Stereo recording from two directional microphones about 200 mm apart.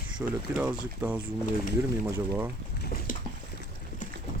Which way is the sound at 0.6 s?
5° right (ahead or behind).